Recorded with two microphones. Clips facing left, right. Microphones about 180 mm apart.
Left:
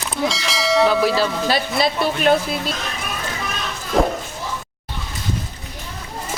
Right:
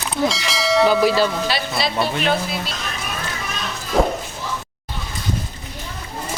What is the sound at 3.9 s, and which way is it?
Speech, centre (ahead or behind).